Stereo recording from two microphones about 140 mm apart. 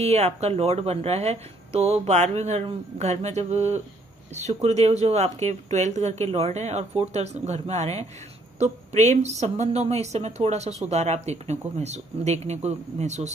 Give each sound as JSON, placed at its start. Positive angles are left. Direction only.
{"t": 0.0, "sound": "speech", "side_deg": -50}